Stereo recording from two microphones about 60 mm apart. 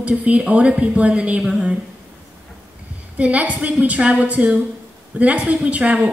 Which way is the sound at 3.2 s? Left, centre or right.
Right.